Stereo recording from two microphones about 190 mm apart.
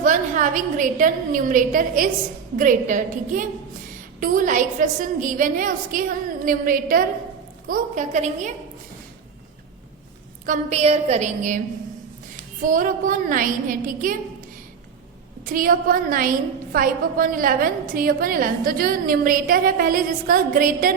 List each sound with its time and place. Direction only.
0.0 s a woman's voice: 40° right (ahead or behind)
10.4 s a woman's voice: 40° right (ahead or behind)
12.6 s a woman's voice: 45° right (ahead or behind)
15.5 s a woman's voice: 45° right (ahead or behind)